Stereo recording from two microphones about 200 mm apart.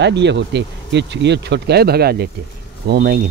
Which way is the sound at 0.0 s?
60° right (ahead or behind).